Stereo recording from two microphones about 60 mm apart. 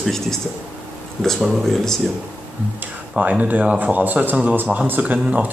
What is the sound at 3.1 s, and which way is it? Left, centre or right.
Speech, right.